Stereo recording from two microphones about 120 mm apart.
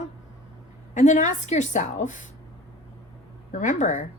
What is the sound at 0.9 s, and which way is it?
A woman's voice, 90° left.